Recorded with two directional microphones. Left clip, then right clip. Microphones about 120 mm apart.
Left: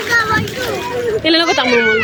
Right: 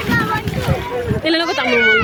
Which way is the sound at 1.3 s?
20° left (ahead or behind).